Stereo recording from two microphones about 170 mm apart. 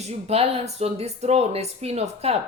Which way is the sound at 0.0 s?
40° right (ahead or behind).